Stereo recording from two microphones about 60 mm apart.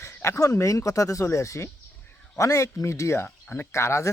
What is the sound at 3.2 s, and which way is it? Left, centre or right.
Speech, left.